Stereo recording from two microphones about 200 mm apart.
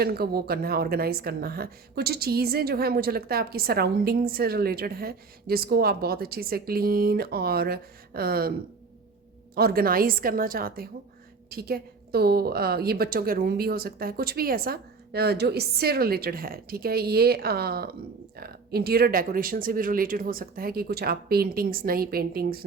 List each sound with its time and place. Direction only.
0.0 s a woman's voice: 50° right (ahead or behind)
9.6 s a woman's voice: 50° right (ahead or behind)